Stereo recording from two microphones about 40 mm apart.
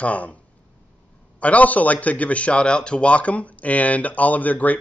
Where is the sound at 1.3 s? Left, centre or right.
Left.